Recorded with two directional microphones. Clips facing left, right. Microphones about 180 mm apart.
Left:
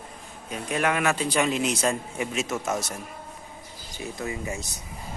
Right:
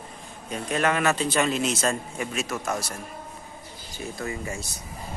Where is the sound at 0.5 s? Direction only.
10° left (ahead or behind).